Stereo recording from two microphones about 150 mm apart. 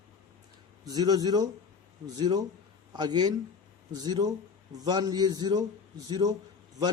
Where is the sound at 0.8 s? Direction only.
25° right (ahead or behind).